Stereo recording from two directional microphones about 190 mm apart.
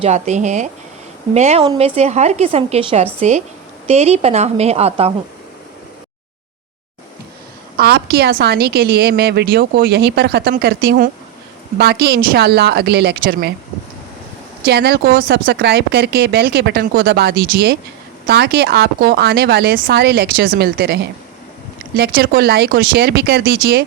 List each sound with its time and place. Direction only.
0.0 s a woman's voice: 35° right (ahead or behind)
7.8 s a woman's voice: 55° right (ahead or behind)
14.6 s a woman's voice: 60° right (ahead or behind)